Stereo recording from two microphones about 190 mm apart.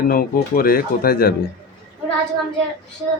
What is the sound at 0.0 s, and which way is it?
Speech, 50° left (ahead or behind).